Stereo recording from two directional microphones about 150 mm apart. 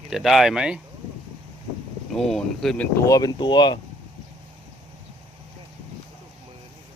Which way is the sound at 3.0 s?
25° left (ahead or behind).